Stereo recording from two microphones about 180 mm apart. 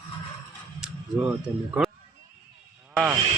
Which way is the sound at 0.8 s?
10° right (ahead or behind).